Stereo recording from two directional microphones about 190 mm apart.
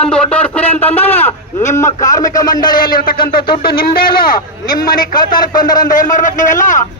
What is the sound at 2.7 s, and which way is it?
A man's voice, 50° left (ahead or behind).